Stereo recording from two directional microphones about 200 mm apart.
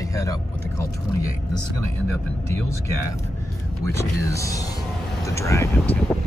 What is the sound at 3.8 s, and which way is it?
Speech, 15° left (ahead or behind).